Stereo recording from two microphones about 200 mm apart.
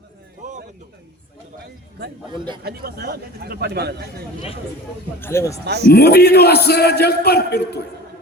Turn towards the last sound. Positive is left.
turn(degrees=55)  # may be behind; listen again after turning